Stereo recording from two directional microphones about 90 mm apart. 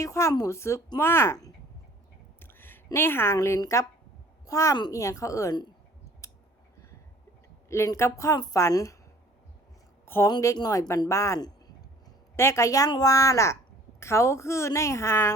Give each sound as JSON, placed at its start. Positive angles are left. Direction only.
{"t": 0.0, "sound": "a woman's voice", "side_deg": 35}
{"t": 2.4, "sound": "a sound", "side_deg": 25}
{"t": 3.3, "sound": "a woman's voice", "side_deg": 35}
{"t": 7.9, "sound": "a woman's voice", "side_deg": 35}
{"t": 10.1, "sound": "a woman's voice", "side_deg": 25}
{"t": 10.4, "sound": "a woman's voice", "side_deg": 35}